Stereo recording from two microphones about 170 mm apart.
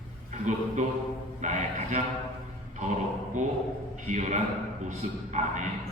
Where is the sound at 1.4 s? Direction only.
45° right (ahead or behind).